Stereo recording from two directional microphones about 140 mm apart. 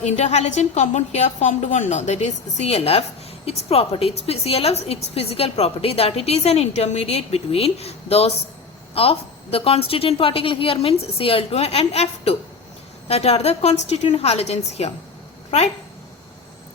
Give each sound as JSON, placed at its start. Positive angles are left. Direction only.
{"t": 0.0, "sound": "a woman's voice", "side_deg": 55}